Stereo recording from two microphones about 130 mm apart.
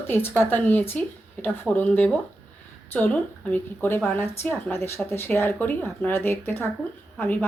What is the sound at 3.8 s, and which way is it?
Speech, 15° left (ahead or behind).